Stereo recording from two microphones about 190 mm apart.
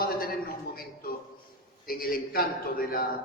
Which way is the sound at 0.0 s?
50° left (ahead or behind).